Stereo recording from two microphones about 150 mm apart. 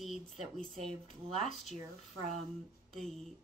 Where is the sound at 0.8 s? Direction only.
40° right (ahead or behind).